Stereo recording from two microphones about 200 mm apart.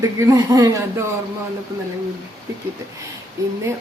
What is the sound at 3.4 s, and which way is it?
Speech, 15° right (ahead or behind).